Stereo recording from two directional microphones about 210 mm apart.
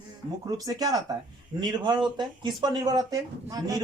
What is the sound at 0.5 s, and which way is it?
Speech, 15° right (ahead or behind).